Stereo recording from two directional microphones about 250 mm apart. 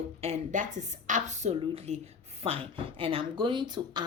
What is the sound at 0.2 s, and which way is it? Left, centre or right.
Speech, right.